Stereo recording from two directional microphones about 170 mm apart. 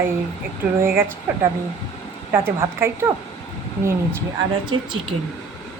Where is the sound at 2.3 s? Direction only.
15° right (ahead or behind).